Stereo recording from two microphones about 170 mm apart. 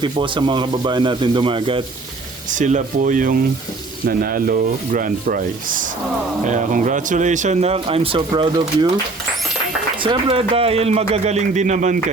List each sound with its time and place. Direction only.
0.0 s speech: 25° right (ahead or behind)
2.5 s speech: 45° right (ahead or behind)
4.0 s sanding: 55° right (ahead or behind)
6.4 s speech: 50° right (ahead or behind); by 8.9 s 25° right (ahead or behind)
10.0 s speech: 30° right (ahead or behind); by 11.9 s 45° right (ahead or behind)